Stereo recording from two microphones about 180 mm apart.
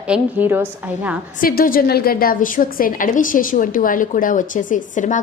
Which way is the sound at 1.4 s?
50° left (ahead or behind).